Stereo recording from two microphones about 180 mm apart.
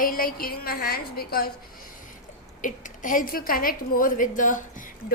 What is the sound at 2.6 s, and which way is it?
A woman's voice, 45° left (ahead or behind).